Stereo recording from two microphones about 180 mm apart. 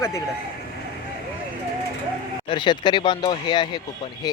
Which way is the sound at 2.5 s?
25° left (ahead or behind).